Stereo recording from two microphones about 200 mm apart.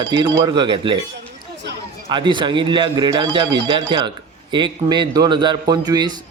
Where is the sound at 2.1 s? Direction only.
25° right (ahead or behind).